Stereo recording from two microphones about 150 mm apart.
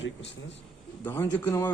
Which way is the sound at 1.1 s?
15° left (ahead or behind).